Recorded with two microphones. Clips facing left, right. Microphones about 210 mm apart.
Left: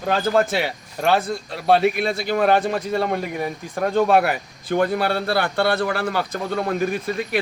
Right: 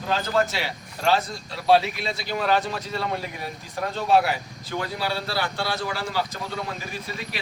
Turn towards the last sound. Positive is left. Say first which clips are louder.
# left 10 dB
turn(degrees=55)  # may be behind; listen again after turning